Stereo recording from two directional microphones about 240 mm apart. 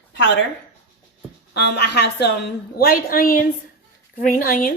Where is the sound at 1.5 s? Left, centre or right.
Left.